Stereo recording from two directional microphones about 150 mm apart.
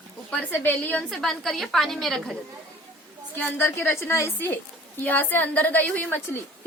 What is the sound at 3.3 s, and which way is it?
A woman's voice, 15° left (ahead or behind).